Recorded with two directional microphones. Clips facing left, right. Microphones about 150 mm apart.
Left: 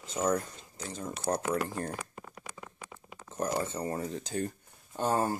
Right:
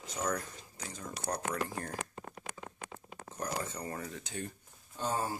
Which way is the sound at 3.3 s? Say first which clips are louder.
Left 6 dB; 25° left (ahead or behind).